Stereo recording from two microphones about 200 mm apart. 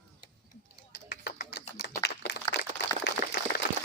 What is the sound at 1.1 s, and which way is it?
Typing, 55° left (ahead or behind).